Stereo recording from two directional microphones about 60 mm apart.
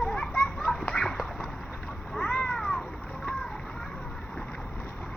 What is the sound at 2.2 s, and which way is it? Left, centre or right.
Cat, centre.